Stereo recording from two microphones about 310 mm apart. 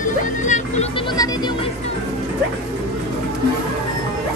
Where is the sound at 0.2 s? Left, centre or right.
Left.